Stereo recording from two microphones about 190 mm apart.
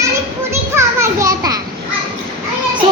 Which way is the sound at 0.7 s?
15° right (ahead or behind).